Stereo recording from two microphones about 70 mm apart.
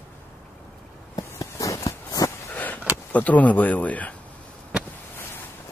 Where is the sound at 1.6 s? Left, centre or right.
Left.